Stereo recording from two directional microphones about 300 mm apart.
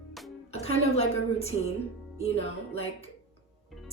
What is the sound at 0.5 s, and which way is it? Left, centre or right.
A woman's voice, left.